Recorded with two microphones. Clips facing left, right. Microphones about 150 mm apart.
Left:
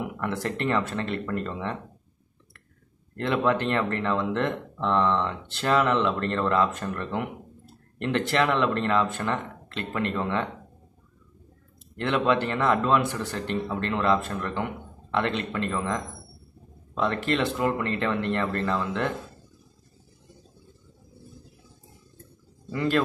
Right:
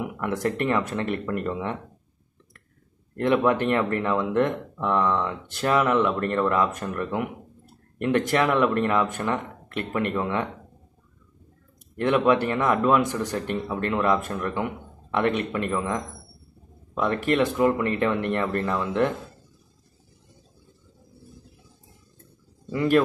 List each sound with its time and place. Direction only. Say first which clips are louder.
0.2 s speech: right 4 dB; 15° right (ahead or behind)
3.4 s speech: right 2 dB; 15° right (ahead or behind)
8.3 s speech: even; 10° right (ahead or behind)
12.0 s speech: right 3 dB; 15° right (ahead or behind)
17.0 s speech: right 3 dB; 15° right (ahead or behind)
22.7 s speech: right 4 dB; 15° right (ahead or behind)